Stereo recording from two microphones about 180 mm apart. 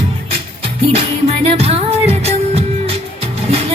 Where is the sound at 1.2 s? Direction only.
35° right (ahead or behind).